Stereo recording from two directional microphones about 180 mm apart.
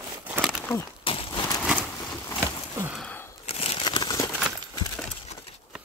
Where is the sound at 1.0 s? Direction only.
30° left (ahead or behind).